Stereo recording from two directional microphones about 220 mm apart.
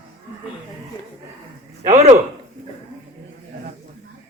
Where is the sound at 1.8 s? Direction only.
30° right (ahead or behind).